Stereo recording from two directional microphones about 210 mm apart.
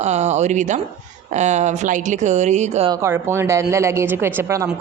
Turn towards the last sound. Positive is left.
turn(degrees=-15)  # may be behind; listen again after turning